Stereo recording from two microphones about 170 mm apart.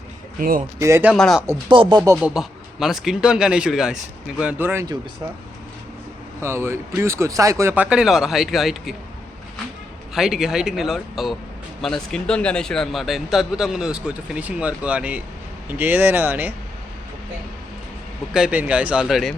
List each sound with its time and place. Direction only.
0.3 s speech: 55° right (ahead or behind)
0.8 s speech: 15° right (ahead or behind)
1.1 s speech: centre (ahead or behind)
1.7 s music: 30° right (ahead or behind)
2.2 s speech: 5° right (ahead or behind)
6.4 s speech: 15° right (ahead or behind)
10.2 s speech: 5° right (ahead or behind)
18.3 s speech: 5° right (ahead or behind)